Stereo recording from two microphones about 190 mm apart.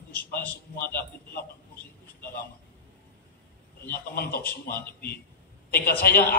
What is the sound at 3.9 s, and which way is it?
A woman's voice, 55° left (ahead or behind).